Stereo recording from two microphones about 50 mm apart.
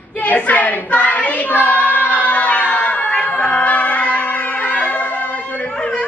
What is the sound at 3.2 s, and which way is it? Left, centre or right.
Music, left.